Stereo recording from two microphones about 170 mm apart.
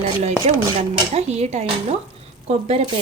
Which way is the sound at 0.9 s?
40° right (ahead or behind).